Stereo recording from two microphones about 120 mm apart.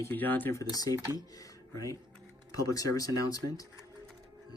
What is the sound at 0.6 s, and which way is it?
Speech, 30° left (ahead or behind).